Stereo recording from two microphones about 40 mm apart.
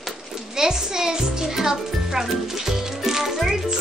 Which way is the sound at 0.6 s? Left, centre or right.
Centre.